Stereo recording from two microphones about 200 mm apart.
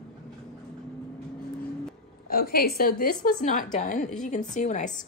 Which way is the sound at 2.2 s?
50° left (ahead or behind).